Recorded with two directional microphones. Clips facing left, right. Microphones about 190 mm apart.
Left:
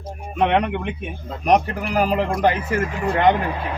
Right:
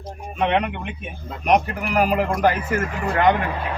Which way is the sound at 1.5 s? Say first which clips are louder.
Left 1 dB; 30° left (ahead or behind).